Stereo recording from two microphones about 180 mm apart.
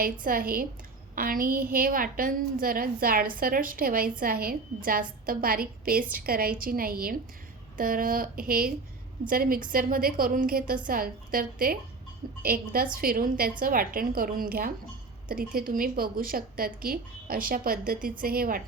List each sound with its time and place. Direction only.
0.0 s a woman's voice: 55° right (ahead or behind)